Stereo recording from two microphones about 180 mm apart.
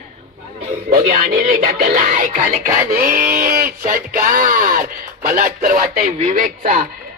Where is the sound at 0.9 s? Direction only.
45° right (ahead or behind).